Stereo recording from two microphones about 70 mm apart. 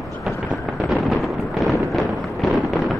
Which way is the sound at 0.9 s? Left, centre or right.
Centre.